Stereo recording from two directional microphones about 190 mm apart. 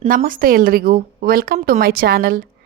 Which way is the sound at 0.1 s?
45° right (ahead or behind).